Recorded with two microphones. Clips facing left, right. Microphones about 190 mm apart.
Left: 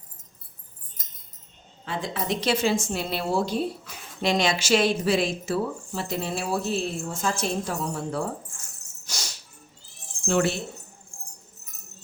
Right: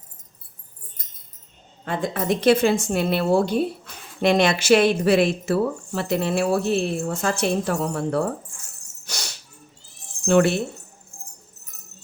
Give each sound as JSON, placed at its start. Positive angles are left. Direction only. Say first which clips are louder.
{"t": 1.8, "sound": "speech", "louder": "right 5 dB", "side_deg": -50}
{"t": 9.0, "sound": "a sound", "louder": "right 3 dB", "side_deg": -60}
{"t": 10.2, "sound": "speech", "louder": "right 6 dB", "side_deg": -60}
{"t": 11.1, "sound": "music", "louder": "right 1 dB", "side_deg": -5}